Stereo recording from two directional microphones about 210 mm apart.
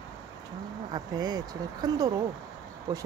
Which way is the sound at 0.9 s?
20° right (ahead or behind).